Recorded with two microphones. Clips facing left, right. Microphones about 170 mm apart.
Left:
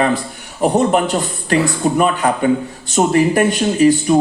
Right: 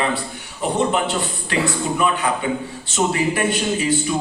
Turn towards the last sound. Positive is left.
turn(degrees=45)  # may be behind; listen again after turning